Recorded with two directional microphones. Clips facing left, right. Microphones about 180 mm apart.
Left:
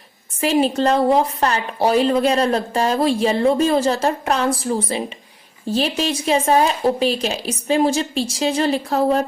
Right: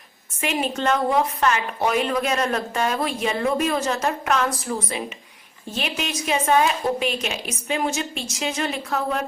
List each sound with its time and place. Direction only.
0.3 s a woman's voice: 35° left (ahead or behind)